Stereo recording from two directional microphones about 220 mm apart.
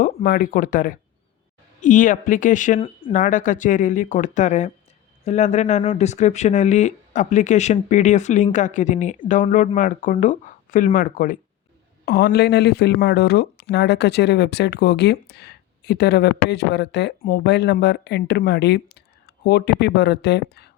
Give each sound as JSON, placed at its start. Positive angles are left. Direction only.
{"t": 0.0, "sound": "speech", "side_deg": 40}